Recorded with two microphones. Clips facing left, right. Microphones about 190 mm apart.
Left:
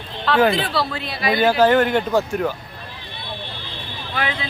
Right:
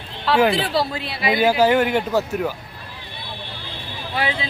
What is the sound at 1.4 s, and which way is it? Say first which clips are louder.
A man's voice: left 1 dB; 10° right (ahead or behind).